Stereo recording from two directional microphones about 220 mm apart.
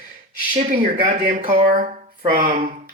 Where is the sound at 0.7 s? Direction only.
35° right (ahead or behind).